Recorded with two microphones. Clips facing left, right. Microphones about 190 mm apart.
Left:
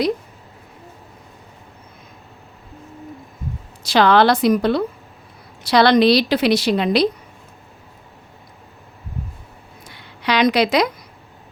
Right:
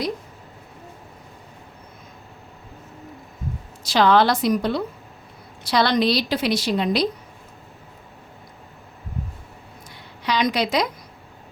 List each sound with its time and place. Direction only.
3.8 s a woman's voice: 70° left (ahead or behind)
10.2 s a woman's voice: 70° left (ahead or behind)